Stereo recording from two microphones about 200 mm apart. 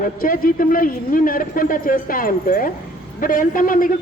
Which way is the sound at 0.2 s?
45° left (ahead or behind).